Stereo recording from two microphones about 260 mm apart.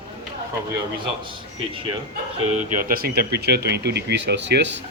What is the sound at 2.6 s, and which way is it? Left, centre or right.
Speech, right.